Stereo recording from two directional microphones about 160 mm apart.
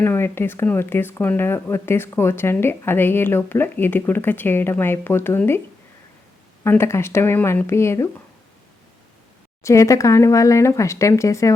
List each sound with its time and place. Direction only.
0.0 s speech: 15° left (ahead or behind)
6.7 s speech: 15° left (ahead or behind)
9.6 s speech: 20° left (ahead or behind)